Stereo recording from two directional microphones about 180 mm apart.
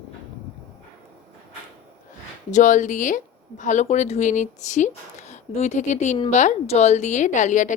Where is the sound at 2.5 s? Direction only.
45° left (ahead or behind).